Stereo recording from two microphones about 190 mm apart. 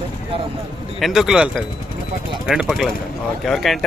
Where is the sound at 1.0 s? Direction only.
Centre (ahead or behind).